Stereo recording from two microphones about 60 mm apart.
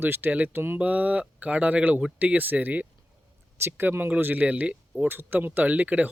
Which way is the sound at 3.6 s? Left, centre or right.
Right.